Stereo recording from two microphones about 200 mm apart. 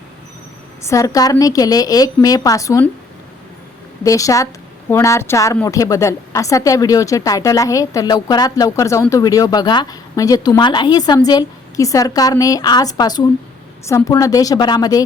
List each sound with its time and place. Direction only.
0.8 s a woman's voice: 15° left (ahead or behind)
4.0 s a woman's voice: 15° left (ahead or behind)